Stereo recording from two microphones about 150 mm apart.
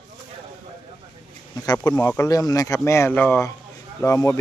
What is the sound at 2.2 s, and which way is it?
Speech, 25° left (ahead or behind).